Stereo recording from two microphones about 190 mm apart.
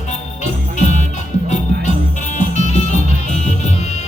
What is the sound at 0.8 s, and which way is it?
Music, 40° left (ahead or behind).